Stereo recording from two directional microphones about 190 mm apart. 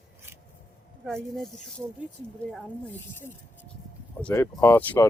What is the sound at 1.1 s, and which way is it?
Speech, centre (ahead or behind).